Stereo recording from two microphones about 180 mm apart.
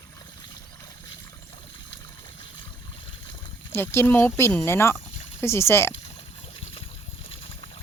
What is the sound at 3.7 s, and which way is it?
Speech, 15° left (ahead or behind).